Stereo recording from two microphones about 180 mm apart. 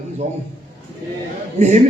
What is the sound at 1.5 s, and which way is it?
Speech, 40° right (ahead or behind).